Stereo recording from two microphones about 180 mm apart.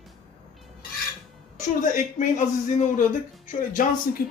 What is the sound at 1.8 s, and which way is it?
Speech, 45° left (ahead or behind).